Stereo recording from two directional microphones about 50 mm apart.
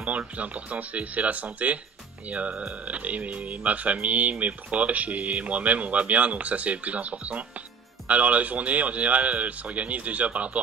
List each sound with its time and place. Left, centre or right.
0.0 s speech: right